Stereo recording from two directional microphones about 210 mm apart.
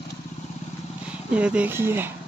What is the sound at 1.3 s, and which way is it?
Speech, 5° right (ahead or behind).